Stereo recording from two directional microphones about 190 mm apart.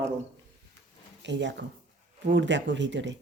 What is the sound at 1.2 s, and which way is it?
Speech, 70° right (ahead or behind).